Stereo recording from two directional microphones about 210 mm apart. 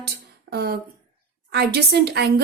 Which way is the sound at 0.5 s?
50° right (ahead or behind).